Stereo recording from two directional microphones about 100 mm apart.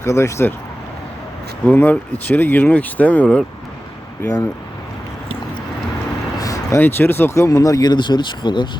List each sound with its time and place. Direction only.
0.0 s speech: 30° left (ahead or behind)
1.6 s speech: 15° left (ahead or behind)
4.2 s speech: 25° left (ahead or behind)
6.4 s a sound: 35° left (ahead or behind)
6.7 s speech: 20° left (ahead or behind); by 8.7 s 50° left (ahead or behind)